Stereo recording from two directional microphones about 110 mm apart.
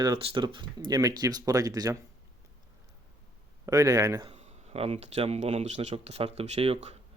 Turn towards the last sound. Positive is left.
turn(degrees=-70)  # may be behind; listen again after turning